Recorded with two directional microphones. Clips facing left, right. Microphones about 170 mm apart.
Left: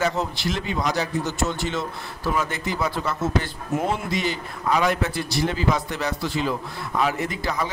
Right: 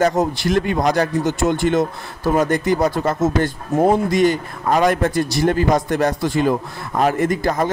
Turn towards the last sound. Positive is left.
turn(degrees=-45)  # may be behind; listen again after turning